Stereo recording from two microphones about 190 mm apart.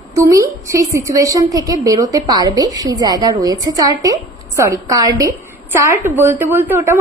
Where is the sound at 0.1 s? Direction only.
15° right (ahead or behind).